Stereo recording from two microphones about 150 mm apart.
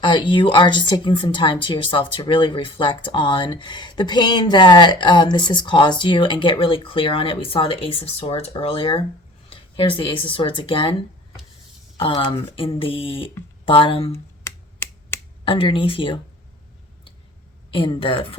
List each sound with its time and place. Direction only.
0.0 s a woman's voice: 30° left (ahead or behind)
11.9 s a woman's voice: 35° left (ahead or behind)
14.4 s finger snapping: 15° left (ahead or behind)
15.4 s a woman's voice: 35° left (ahead or behind)
17.7 s a woman's voice: 35° left (ahead or behind)